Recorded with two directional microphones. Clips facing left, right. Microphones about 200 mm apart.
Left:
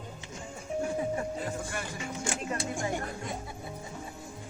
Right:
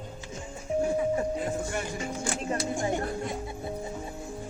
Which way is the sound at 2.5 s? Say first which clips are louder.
Right 6 dB; 30° right (ahead or behind).